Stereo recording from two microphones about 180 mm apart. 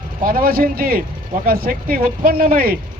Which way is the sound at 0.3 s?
55° right (ahead or behind).